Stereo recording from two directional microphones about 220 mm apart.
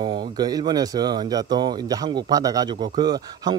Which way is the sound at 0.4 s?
15° right (ahead or behind).